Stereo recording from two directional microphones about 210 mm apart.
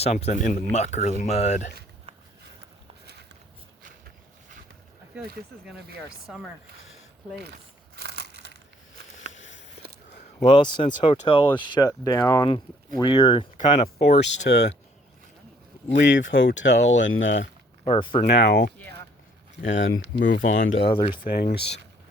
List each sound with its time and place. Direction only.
0.0 s speech: 30° left (ahead or behind)
5.1 s speech: 5° right (ahead or behind)
7.9 s crushing: 50° right (ahead or behind)
9.3 s a sound: 60° left (ahead or behind)
10.4 s speech: 20° left (ahead or behind)
14.2 s speech: 60° left (ahead or behind)
15.9 s speech: 60° left (ahead or behind)
17.8 s speech: 30° left (ahead or behind)
18.3 s speech: 55° left (ahead or behind)
19.6 s speech: 65° left (ahead or behind)
20.7 s speech: 25° left (ahead or behind)
21.2 s speech: 45° left (ahead or behind)